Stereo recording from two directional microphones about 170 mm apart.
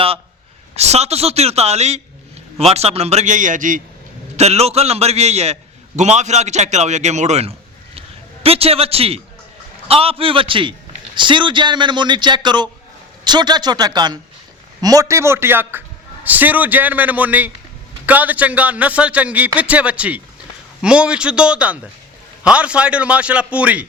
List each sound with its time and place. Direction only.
0.8 s a man's voice: 40° right (ahead or behind)
4.4 s a man's voice: 40° right (ahead or behind); by 23.8 s 5° right (ahead or behind)